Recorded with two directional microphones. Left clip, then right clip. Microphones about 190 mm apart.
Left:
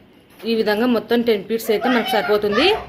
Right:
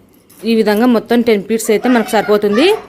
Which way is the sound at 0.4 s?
55° right (ahead or behind).